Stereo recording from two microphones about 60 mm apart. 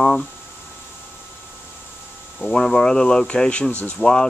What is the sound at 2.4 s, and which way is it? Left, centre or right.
Speech, centre.